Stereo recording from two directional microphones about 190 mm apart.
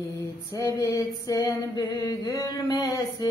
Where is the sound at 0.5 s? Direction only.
15° left (ahead or behind).